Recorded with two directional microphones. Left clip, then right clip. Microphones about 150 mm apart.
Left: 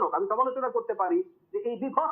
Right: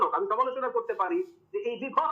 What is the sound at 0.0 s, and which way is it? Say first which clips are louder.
Speech: even; 25° right (ahead or behind).